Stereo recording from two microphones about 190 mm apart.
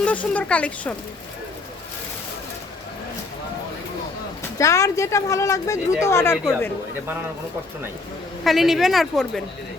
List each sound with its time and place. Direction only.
0.0 s speech: 10° left (ahead or behind)
4.5 s speech: 15° left (ahead or behind)
8.4 s speech: centre (ahead or behind)